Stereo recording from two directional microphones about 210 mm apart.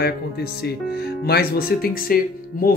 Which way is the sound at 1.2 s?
50° left (ahead or behind).